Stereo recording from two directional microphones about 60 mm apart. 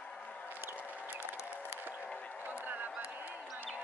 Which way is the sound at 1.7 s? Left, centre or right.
Right.